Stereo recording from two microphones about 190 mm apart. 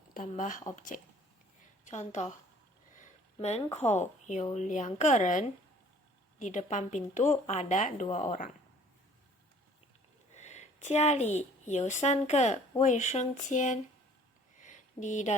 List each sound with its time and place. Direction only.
0.1 s a woman's voice: 45° left (ahead or behind)
10.3 s a woman's voice: 35° left (ahead or behind)
14.6 s a sound: 40° left (ahead or behind)